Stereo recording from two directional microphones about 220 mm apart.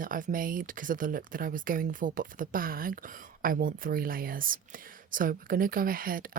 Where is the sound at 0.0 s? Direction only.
40° right (ahead or behind).